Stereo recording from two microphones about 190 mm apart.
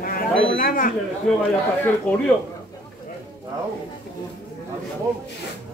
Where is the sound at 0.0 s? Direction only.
50° left (ahead or behind).